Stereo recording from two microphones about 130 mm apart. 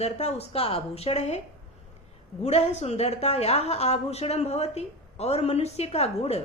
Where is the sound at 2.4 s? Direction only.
55° left (ahead or behind).